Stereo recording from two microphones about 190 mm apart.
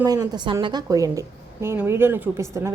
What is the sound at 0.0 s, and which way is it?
A woman's voice, 20° right (ahead or behind).